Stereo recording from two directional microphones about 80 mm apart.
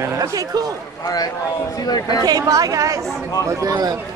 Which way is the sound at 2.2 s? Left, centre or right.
Right.